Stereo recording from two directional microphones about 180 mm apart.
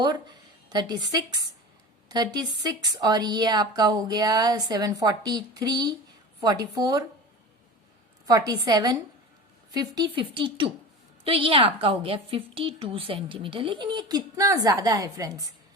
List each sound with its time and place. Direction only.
0.0 s a woman's voice: 25° right (ahead or behind)
8.3 s a woman's voice: 20° right (ahead or behind)